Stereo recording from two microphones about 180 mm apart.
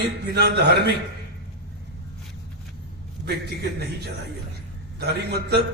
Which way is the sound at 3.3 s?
65° right (ahead or behind).